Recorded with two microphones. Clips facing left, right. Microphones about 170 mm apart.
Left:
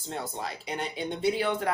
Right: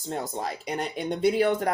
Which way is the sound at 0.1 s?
45° right (ahead or behind).